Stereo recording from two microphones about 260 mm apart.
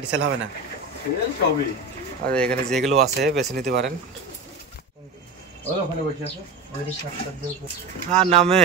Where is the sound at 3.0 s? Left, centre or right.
Right.